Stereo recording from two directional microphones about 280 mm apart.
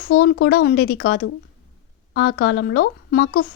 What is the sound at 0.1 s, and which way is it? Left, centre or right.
Speech, left.